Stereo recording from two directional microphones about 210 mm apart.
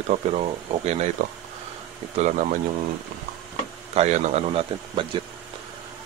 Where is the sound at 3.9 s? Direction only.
30° right (ahead or behind).